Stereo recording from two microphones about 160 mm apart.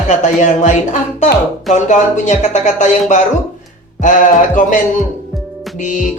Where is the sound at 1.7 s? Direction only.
50° left (ahead or behind).